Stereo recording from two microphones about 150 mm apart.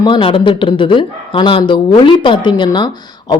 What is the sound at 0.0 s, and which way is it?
Speech, 35° left (ahead or behind).